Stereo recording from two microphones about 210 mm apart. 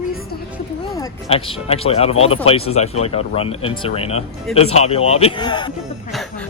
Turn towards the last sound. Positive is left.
turn(degrees=20)  # may be behind; listen again after turning